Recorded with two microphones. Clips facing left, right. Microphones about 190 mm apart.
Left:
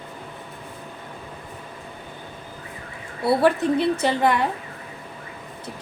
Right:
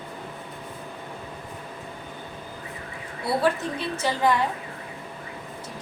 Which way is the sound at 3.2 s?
60° left (ahead or behind).